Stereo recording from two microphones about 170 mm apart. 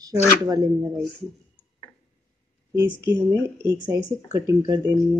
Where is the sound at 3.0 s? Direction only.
15° right (ahead or behind).